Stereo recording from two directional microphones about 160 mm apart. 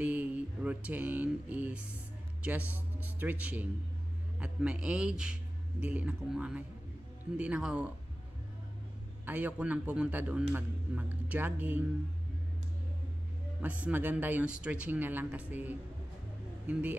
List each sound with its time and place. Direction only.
0.0 s a sound: 10° right (ahead or behind)
2.4 s speech: 10° right (ahead or behind)
9.2 s speech: 10° right (ahead or behind)
13.6 s speech: 10° right (ahead or behind)